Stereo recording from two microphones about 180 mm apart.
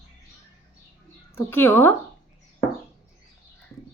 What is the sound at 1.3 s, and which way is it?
Speech, 15° left (ahead or behind).